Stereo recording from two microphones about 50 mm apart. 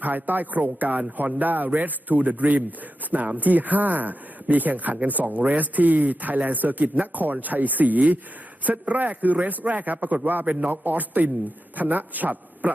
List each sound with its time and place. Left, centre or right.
0.0 s speech: right